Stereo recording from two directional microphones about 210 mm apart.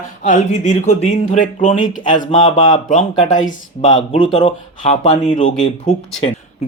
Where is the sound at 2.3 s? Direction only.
20° left (ahead or behind).